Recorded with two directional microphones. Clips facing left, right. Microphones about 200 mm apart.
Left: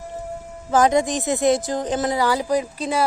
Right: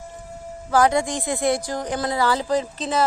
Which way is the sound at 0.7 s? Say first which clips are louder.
Left 2 dB; 20° left (ahead or behind).